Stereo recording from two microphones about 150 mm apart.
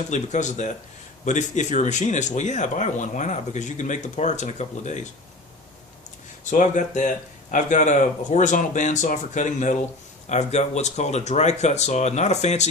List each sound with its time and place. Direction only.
0.1 s speech: 50° left (ahead or behind)
6.4 s speech: 55° left (ahead or behind)